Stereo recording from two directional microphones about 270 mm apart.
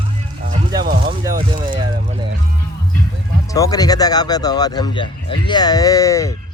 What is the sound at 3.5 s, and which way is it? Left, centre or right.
A man's voice, centre.